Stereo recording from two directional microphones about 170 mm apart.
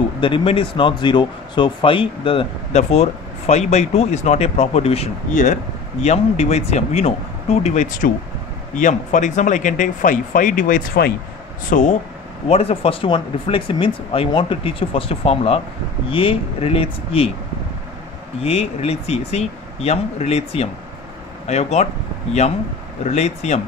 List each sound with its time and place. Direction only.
0.2 s speech: 30° left (ahead or behind); by 12.0 s 45° left (ahead or behind)
12.4 s speech: 35° left (ahead or behind)
18.4 s speech: 35° left (ahead or behind)
23.0 s speech: 40° left (ahead or behind)